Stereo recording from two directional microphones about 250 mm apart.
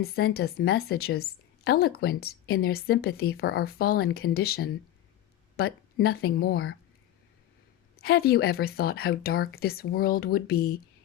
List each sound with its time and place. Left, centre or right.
0.2 s a woman's voice: left
5.5 s a sound: left
6.1 s a woman's voice: left
7.9 s a woman's voice: left